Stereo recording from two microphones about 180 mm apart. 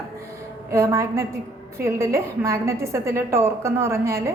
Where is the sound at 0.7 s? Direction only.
15° right (ahead or behind).